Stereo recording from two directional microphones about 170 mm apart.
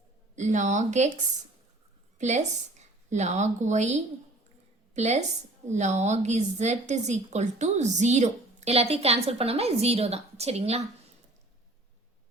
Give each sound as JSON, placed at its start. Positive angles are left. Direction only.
{"t": 0.3, "sound": "a woman's voice", "side_deg": -45}
{"t": 2.1, "sound": "a woman's voice", "side_deg": -45}